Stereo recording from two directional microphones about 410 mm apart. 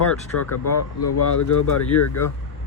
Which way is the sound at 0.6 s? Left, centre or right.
Left.